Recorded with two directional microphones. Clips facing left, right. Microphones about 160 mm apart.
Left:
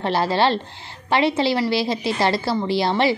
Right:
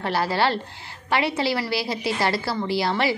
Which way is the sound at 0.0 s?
25° left (ahead or behind).